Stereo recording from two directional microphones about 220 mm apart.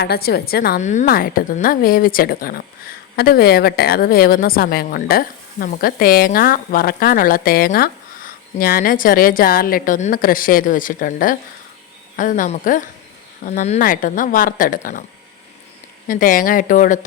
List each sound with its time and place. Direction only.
0.0 s a woman's voice: 45° left (ahead or behind)
16.0 s a woman's voice: 40° left (ahead or behind)